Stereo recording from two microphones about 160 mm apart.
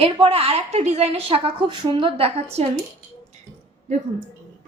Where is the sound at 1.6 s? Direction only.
30° right (ahead or behind).